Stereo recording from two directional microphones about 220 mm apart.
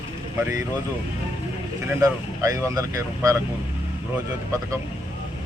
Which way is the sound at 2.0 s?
15° right (ahead or behind).